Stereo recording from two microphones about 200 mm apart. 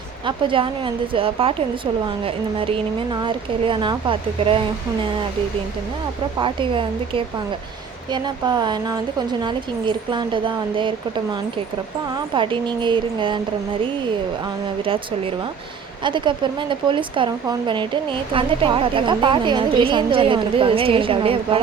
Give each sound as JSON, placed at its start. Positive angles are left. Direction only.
{"t": 0.3, "sound": "speech", "side_deg": -25}
{"t": 6.4, "sound": "speech", "side_deg": -25}
{"t": 12.3, "sound": "speech", "side_deg": -25}
{"t": 16.0, "sound": "speech", "side_deg": -25}